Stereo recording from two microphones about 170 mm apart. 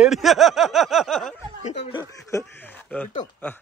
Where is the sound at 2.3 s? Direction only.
20° left (ahead or behind).